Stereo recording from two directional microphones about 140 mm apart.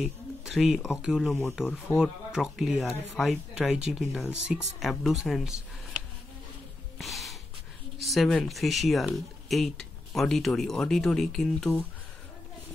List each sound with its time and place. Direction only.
0.0 s speech: centre (ahead or behind)
7.0 s gasp: centre (ahead or behind)
8.0 s speech: centre (ahead or behind)